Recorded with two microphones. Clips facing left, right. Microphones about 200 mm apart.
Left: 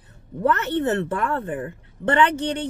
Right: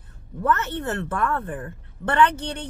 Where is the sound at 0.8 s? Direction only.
25° left (ahead or behind).